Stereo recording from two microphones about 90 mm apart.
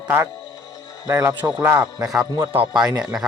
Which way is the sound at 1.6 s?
30° right (ahead or behind).